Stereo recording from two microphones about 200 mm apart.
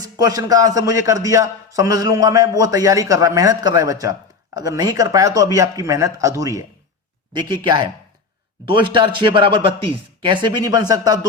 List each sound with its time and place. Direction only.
0.0 s a man's voice: 20° right (ahead or behind)